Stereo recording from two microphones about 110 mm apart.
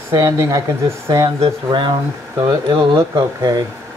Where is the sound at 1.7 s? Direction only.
45° right (ahead or behind).